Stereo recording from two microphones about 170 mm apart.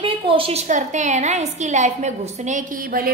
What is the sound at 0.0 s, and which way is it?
A woman's voice, 30° right (ahead or behind).